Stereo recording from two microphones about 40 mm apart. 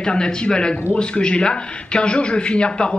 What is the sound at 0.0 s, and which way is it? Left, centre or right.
A man's voice, centre.